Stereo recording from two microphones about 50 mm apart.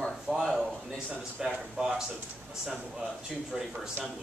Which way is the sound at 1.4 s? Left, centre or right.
Centre.